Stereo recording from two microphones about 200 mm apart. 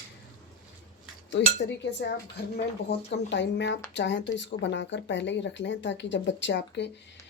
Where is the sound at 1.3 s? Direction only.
60° left (ahead or behind).